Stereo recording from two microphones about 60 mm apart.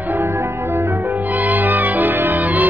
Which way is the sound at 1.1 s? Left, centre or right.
Right.